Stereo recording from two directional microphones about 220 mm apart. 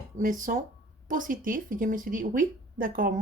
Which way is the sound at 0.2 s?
35° right (ahead or behind).